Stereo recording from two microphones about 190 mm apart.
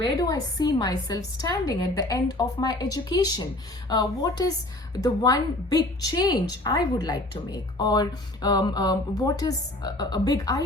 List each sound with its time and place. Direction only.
0.0 s a woman's voice: 20° left (ahead or behind)